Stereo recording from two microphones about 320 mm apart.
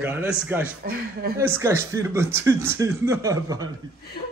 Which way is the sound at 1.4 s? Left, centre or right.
Centre.